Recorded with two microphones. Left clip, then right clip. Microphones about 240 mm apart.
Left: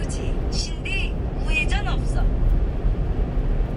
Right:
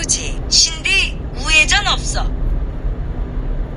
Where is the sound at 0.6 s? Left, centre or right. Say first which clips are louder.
Right 13 dB; right.